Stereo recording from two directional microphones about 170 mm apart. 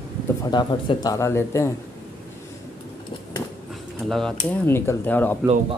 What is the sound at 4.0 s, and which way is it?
Speech, centre (ahead or behind).